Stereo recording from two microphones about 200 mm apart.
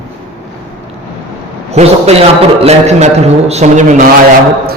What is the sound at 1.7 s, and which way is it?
A man's voice, 30° right (ahead or behind).